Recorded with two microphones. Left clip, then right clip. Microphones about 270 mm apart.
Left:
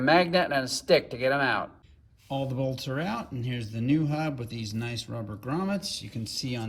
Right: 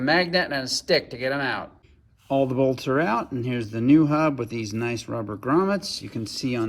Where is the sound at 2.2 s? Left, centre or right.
Centre.